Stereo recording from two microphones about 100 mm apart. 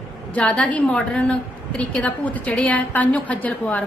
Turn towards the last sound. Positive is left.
turn(degrees=15)  # may be behind; listen again after turning